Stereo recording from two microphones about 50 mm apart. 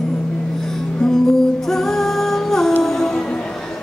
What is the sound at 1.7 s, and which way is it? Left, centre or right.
Music, centre.